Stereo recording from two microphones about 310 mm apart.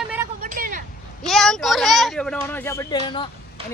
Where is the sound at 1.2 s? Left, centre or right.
Centre.